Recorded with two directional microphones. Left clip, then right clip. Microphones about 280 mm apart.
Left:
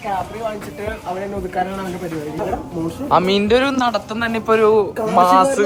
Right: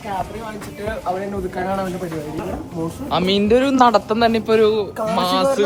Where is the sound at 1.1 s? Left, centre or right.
Centre.